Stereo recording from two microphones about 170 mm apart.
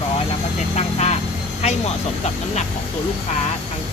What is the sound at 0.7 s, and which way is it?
Speech, 40° left (ahead or behind).